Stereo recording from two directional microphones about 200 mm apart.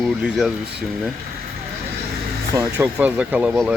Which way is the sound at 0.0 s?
Centre (ahead or behind).